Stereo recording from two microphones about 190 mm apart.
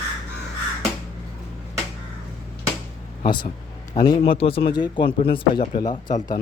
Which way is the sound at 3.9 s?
20° left (ahead or behind).